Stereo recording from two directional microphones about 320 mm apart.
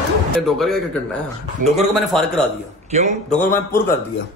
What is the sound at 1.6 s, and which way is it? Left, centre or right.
Speech, right.